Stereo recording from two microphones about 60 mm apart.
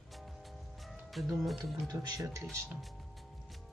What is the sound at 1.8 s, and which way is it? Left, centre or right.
Speech, right.